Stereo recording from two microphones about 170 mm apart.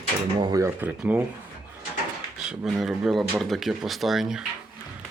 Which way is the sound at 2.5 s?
5° right (ahead or behind).